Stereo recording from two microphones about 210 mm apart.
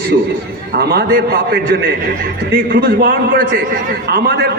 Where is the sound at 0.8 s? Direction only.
45° right (ahead or behind).